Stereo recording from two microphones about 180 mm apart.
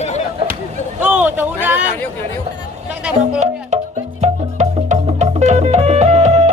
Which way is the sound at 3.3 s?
40° right (ahead or behind).